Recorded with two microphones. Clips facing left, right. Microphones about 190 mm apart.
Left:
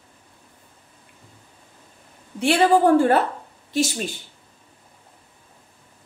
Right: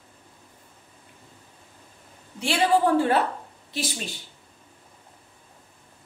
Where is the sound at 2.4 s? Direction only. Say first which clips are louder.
Left 5 dB; 50° left (ahead or behind).